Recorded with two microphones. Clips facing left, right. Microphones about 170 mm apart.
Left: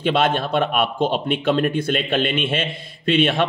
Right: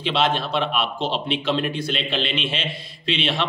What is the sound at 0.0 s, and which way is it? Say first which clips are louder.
Speech: left 3 dB; 50° left (ahead or behind).